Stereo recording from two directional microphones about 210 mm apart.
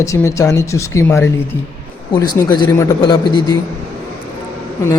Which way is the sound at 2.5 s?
15° left (ahead or behind).